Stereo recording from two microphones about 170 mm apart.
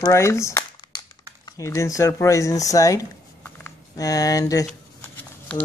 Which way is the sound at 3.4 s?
15° left (ahead or behind).